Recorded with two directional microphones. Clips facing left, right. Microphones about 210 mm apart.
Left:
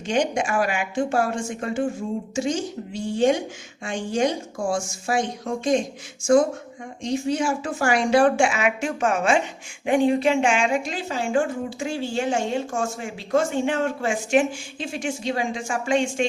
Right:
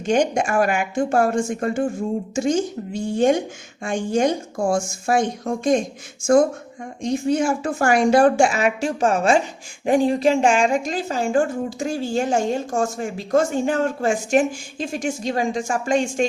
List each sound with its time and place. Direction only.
0.0 s speech: 45° right (ahead or behind)
7.0 s speech: 50° right (ahead or behind)